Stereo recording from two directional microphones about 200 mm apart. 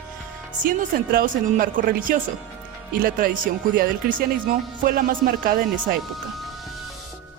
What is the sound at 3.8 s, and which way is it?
Speech, 45° right (ahead or behind).